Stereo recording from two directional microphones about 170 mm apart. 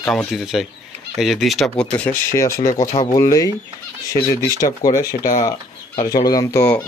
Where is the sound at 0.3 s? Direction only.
Centre (ahead or behind); by 6.9 s 15° left (ahead or behind).